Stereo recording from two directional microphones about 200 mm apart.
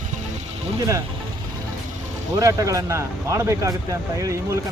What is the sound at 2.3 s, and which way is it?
Speech, 15° right (ahead or behind).